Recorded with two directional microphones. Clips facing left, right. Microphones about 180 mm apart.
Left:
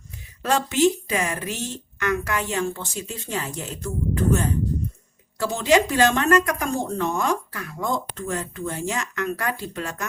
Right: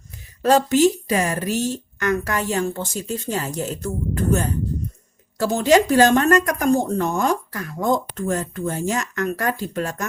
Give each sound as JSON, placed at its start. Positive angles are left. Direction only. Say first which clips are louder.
{"t": 0.4, "sound": "speech", "louder": "right 4 dB", "side_deg": -40}